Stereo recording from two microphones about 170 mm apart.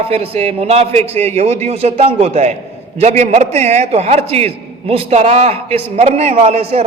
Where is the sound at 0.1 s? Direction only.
40° right (ahead or behind).